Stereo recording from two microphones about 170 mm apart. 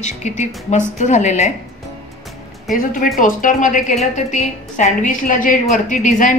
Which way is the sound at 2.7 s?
55° left (ahead or behind).